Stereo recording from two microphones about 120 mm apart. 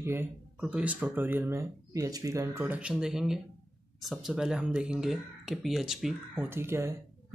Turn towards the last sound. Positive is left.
turn(degrees=-20)  # may be behind; listen again after turning